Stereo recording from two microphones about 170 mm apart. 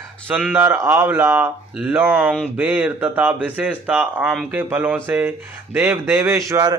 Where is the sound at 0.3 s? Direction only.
10° right (ahead or behind).